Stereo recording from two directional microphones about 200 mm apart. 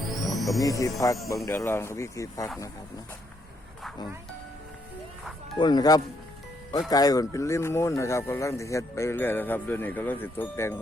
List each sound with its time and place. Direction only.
0.0 s music: centre (ahead or behind)
0.6 s speech: 15° left (ahead or behind)
5.5 s speech: 20° left (ahead or behind)